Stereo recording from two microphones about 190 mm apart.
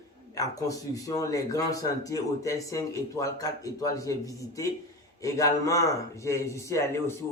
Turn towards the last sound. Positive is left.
turn(degrees=15)  # may be behind; listen again after turning